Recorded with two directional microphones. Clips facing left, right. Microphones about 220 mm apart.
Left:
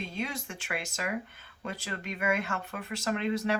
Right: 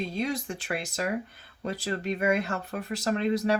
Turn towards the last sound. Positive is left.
turn(degrees=-35)  # may be behind; listen again after turning